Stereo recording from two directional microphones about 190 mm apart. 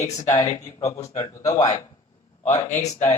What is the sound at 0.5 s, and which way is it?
A man's voice, 15° left (ahead or behind).